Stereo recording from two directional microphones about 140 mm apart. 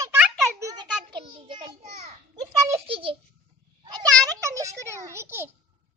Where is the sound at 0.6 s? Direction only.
25° right (ahead or behind).